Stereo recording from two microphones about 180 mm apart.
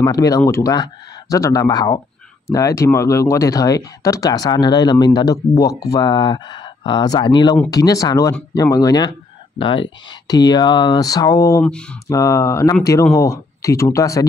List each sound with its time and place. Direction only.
0.0 s speech: 20° left (ahead or behind)